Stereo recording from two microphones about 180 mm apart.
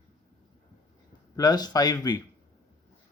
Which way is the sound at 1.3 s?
20° left (ahead or behind).